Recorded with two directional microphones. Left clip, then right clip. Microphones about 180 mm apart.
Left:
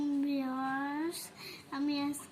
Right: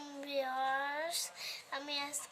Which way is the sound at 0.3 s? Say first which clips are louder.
Even; 60° right (ahead or behind).